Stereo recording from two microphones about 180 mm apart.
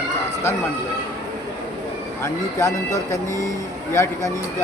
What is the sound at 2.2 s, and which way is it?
Speech, 15° left (ahead or behind).